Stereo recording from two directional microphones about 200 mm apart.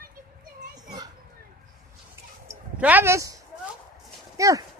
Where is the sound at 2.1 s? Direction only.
10° right (ahead or behind).